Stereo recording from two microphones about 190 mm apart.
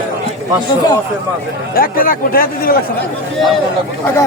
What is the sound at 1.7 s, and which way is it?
Speech, 50° left (ahead or behind).